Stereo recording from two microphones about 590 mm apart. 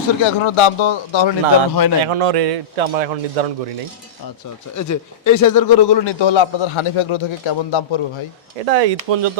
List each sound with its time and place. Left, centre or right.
0.2 s speech: left
2.0 s a man's voice: right
4.8 s speech: left
8.6 s speech: right